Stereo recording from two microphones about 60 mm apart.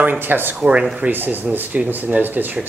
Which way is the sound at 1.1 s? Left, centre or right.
Right.